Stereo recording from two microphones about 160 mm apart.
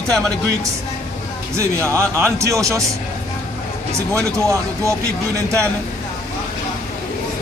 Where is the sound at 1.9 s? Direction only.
15° right (ahead or behind).